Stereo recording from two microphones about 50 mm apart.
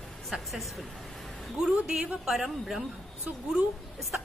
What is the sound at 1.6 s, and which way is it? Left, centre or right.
Speech, centre.